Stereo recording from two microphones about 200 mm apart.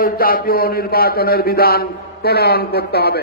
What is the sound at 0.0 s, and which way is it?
A man's voice, 45° left (ahead or behind).